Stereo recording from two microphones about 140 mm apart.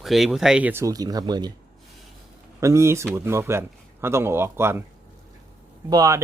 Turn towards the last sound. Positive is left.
turn(degrees=-25)  # may be behind; listen again after turning